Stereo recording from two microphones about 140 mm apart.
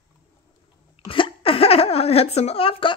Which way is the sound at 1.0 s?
35° left (ahead or behind).